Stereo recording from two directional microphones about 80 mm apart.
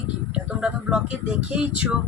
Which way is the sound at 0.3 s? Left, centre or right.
Centre.